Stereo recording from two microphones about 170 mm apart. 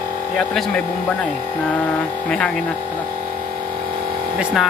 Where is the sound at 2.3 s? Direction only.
5° left (ahead or behind).